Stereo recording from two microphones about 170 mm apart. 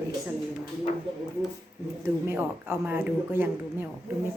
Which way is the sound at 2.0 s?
15° right (ahead or behind).